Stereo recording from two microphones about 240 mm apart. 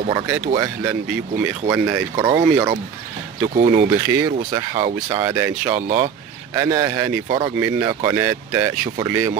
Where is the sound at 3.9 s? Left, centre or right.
Centre.